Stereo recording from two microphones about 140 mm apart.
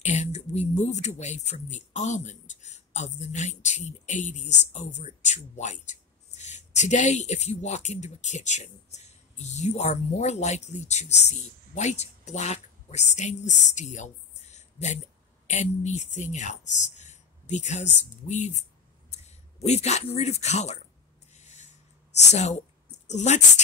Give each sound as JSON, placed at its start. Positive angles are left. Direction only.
{"t": 0.0, "sound": "speech", "side_deg": 55}
{"t": 21.4, "sound": "a sound", "side_deg": 55}
{"t": 22.3, "sound": "a woman's voice", "side_deg": 55}